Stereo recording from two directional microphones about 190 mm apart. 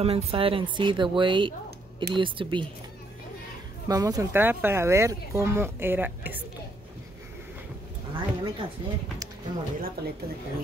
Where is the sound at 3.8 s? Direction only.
20° right (ahead or behind).